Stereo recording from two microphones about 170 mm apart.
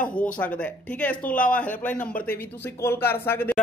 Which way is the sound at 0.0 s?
10° left (ahead or behind).